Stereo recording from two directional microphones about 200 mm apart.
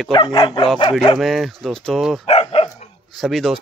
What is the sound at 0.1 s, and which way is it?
Dog, 25° left (ahead or behind).